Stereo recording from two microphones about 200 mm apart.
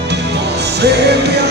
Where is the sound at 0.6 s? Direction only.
55° right (ahead or behind).